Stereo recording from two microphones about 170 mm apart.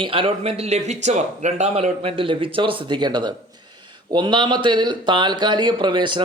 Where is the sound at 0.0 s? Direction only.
30° right (ahead or behind).